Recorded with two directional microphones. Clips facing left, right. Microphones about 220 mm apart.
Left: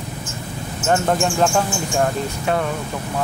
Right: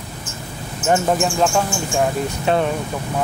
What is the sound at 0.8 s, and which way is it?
Speech, 5° right (ahead or behind).